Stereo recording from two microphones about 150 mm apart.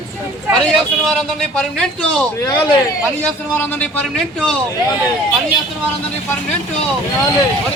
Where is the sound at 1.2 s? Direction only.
5° left (ahead or behind).